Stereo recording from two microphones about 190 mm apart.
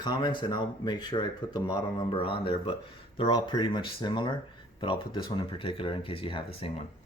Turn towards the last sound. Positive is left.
turn(degrees=30)  # may be behind; listen again after turning